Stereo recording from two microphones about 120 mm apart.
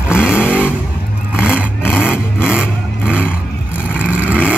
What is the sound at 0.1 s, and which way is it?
Vehicle, 5° right (ahead or behind).